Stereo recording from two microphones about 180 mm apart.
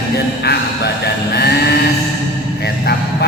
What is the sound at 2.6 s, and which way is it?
Music, 65° left (ahead or behind).